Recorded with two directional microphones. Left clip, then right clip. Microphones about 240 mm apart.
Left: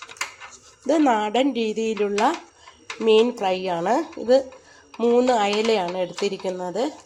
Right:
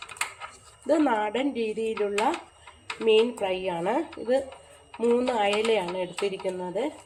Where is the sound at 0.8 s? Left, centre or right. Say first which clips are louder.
Left 4 dB; left.